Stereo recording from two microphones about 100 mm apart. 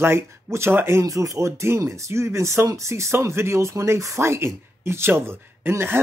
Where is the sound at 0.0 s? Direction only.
25° right (ahead or behind).